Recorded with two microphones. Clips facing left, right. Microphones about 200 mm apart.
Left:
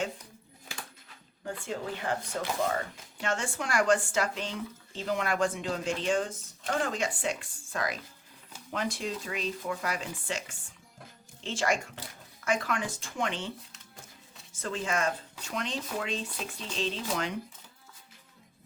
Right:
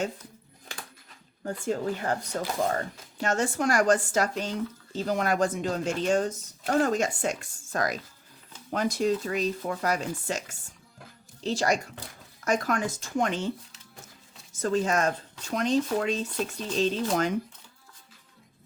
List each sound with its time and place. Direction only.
1.5 s speech: 40° right (ahead or behind)
14.5 s speech: 40° right (ahead or behind)